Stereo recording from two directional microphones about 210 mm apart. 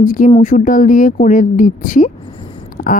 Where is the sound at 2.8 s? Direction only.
40° left (ahead or behind).